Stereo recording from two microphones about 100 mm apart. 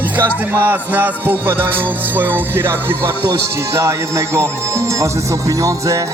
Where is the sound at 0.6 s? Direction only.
20° right (ahead or behind).